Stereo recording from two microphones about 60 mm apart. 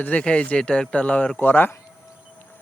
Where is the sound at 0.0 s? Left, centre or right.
Left.